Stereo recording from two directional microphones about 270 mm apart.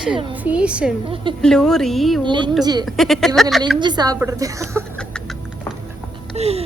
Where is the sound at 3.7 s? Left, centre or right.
Centre.